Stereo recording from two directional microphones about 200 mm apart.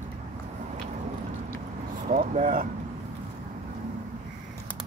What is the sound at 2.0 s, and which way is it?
Speech, 40° right (ahead or behind).